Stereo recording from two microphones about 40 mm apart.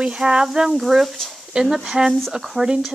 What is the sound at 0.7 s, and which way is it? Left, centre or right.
Speech, centre.